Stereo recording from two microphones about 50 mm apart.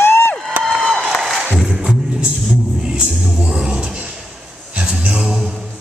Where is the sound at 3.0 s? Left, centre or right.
Right.